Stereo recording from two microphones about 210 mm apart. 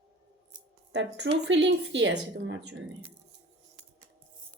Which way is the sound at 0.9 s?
55° right (ahead or behind).